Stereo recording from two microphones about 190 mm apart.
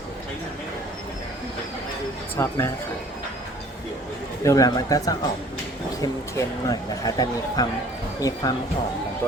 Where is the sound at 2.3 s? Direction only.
10° left (ahead or behind).